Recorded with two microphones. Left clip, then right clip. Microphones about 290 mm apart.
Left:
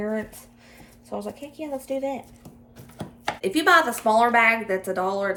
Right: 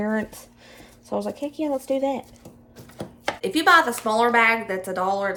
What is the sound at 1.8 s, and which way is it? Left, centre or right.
Speech, right.